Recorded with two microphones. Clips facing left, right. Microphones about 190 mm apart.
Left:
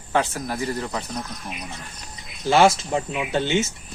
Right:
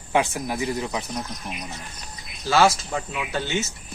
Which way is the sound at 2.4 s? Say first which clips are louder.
Left 2 dB; 20° left (ahead or behind).